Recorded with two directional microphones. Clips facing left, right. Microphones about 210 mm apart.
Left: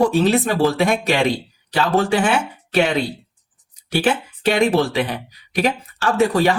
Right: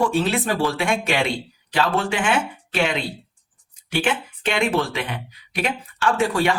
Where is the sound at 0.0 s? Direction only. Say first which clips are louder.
Left 5 dB; 40° left (ahead or behind).